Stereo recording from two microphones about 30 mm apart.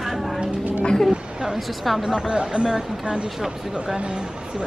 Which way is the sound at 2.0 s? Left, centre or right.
Right.